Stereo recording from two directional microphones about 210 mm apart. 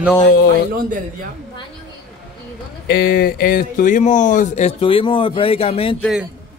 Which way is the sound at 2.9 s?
45° left (ahead or behind).